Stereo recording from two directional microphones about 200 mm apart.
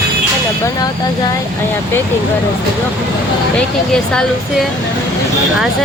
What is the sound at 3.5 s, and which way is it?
Speech, 5° left (ahead or behind).